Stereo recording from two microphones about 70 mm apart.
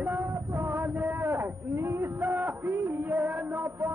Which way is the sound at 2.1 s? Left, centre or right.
Right.